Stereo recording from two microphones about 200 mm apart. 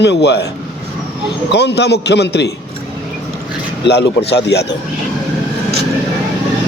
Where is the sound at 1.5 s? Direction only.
55° left (ahead or behind).